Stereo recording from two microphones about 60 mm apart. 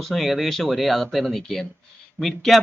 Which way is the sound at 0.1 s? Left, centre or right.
Centre.